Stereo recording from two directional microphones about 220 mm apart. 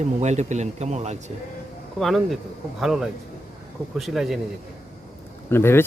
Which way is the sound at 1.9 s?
Centre (ahead or behind).